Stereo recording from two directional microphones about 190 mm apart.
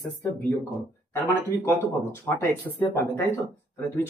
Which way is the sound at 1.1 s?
10° left (ahead or behind).